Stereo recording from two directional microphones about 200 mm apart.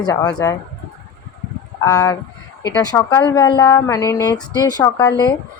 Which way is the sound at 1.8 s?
20° left (ahead or behind).